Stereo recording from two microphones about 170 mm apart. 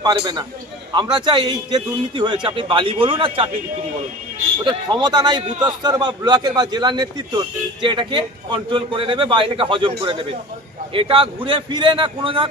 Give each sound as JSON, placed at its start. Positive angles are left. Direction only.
{"t": 0.0, "sound": "a man's voice", "side_deg": -25}
{"t": 4.6, "sound": "a man's voice", "side_deg": -25}